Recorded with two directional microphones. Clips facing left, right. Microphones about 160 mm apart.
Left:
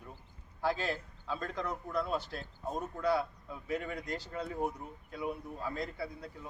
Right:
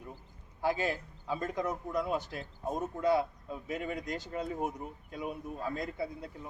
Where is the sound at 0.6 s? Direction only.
15° right (ahead or behind).